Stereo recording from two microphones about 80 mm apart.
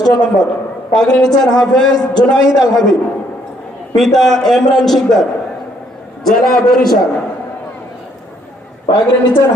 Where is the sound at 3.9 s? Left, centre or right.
Centre.